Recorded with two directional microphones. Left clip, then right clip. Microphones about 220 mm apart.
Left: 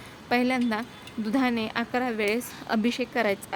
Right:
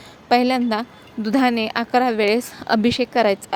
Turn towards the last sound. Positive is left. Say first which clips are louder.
# right 8 dB
turn(degrees=-20)  # may be behind; listen again after turning